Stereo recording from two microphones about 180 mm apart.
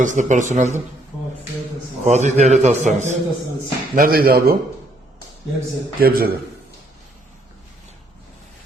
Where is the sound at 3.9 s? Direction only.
55° right (ahead or behind).